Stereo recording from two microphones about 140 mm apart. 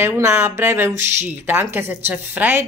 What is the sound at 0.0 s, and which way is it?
Speech, 15° right (ahead or behind).